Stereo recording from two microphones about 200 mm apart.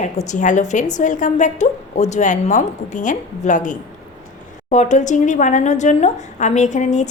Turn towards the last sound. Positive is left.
turn(degrees=35)  # may be behind; listen again after turning